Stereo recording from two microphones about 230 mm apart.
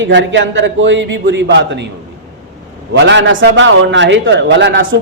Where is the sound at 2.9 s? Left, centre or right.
Right.